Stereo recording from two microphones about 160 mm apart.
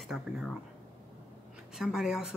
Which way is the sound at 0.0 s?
Centre (ahead or behind).